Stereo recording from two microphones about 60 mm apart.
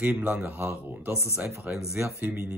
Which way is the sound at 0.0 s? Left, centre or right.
Right.